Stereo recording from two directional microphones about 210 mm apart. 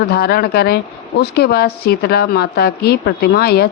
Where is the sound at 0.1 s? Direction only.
45° left (ahead or behind).